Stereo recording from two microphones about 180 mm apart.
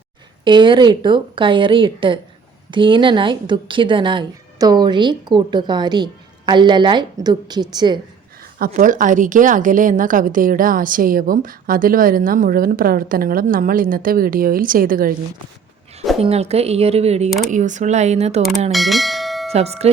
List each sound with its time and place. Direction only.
0.4 s speech: 25° right (ahead or behind)
8.5 s a woman's voice: 50° right (ahead or behind)
16.2 s speech: 35° right (ahead or behind)
17.2 s speech: centre (ahead or behind)
17.5 s speech: 40° right (ahead or behind)
18.7 s bell: centre (ahead or behind)
19.5 s speech: 35° right (ahead or behind)